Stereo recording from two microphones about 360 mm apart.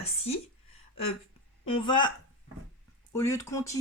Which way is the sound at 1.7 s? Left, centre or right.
Centre.